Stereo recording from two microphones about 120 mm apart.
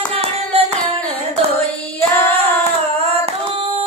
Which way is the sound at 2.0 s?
15° left (ahead or behind).